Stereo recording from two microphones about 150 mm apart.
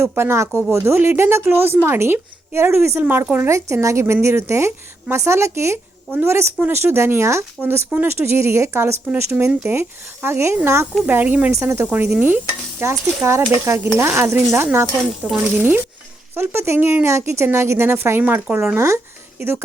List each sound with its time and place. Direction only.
0.2 s a woman's voice: 15° right (ahead or behind)